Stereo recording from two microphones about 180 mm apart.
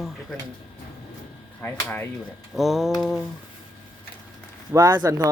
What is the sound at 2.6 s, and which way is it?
Speech, centre (ahead or behind).